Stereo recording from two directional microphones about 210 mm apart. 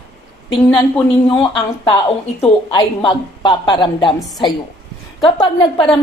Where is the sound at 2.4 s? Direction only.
25° left (ahead or behind).